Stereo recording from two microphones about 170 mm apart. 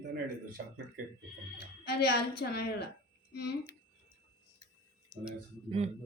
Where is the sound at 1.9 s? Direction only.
70° left (ahead or behind).